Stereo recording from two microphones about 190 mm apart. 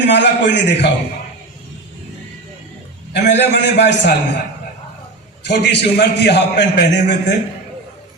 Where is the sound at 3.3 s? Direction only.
65° left (ahead or behind).